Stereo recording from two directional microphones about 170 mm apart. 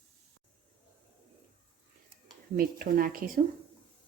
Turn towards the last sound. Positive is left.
turn(degrees=-60)  # may be behind; listen again after turning